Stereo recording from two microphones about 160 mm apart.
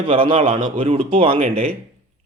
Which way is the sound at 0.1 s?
35° right (ahead or behind).